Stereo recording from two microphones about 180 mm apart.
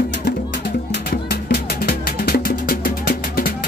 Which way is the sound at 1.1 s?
60° left (ahead or behind).